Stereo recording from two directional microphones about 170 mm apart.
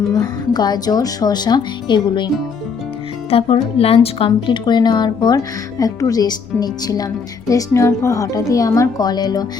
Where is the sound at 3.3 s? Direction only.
35° left (ahead or behind).